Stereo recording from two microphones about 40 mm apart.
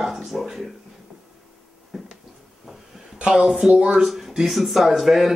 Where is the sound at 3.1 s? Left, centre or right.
Right.